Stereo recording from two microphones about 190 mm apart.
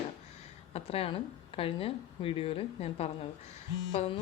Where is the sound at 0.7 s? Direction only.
30° left (ahead or behind).